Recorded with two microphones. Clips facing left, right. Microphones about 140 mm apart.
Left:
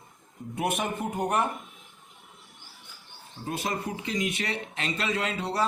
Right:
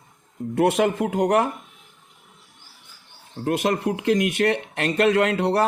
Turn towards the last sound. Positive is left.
turn(degrees=-65)  # may be behind; listen again after turning